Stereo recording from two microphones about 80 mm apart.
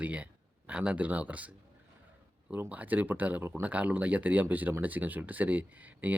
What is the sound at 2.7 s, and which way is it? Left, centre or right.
Speech, right.